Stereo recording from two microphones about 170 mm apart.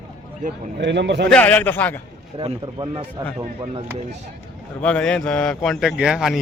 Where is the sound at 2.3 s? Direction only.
30° right (ahead or behind).